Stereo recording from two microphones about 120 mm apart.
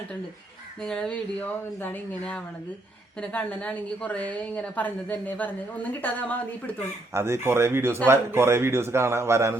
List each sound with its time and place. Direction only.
0.8 s a woman's voice: 5° left (ahead or behind)
7.1 s a man's voice: 20° right (ahead or behind)